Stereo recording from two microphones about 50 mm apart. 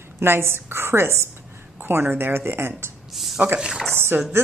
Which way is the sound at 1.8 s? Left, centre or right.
Right.